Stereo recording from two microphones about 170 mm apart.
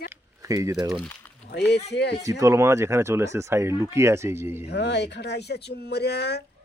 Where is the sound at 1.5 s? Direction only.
80° left.